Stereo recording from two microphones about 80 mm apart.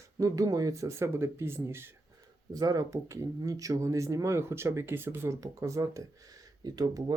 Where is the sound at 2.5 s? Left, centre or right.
Right.